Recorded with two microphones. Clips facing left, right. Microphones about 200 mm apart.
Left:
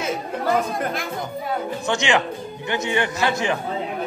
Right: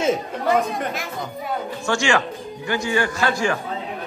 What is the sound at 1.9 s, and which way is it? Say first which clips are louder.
Speech: right 1 dB; 20° left (ahead or behind).